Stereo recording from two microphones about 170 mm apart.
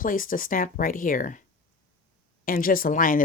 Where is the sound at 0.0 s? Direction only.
55° left (ahead or behind).